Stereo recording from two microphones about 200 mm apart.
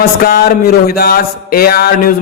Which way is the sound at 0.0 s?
50° left (ahead or behind).